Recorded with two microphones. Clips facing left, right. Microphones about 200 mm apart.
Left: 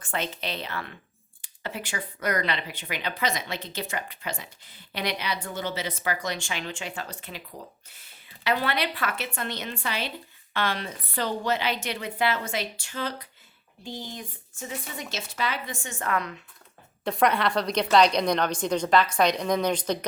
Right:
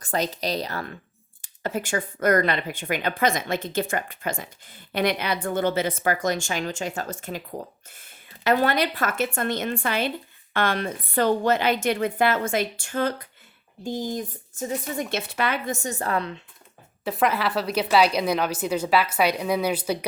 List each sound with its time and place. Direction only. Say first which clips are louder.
0.0 s speech: right 5 dB; 40° right (ahead or behind)
15.1 s speech: right 3 dB; 60° right (ahead or behind); by 16.4 s 30° right (ahead or behind)
17.0 s a woman's voice: even; 5° right (ahead or behind)